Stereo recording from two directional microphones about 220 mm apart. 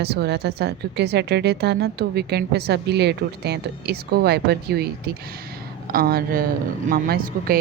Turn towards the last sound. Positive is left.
turn(degrees=-40)  # may be behind; listen again after turning